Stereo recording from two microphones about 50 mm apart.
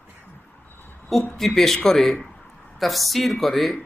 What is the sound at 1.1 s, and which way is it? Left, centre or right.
Speech, centre.